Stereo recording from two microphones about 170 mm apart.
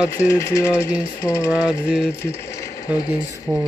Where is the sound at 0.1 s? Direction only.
20° left (ahead or behind).